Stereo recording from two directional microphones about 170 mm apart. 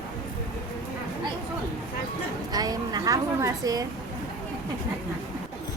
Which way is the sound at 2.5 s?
20° right (ahead or behind).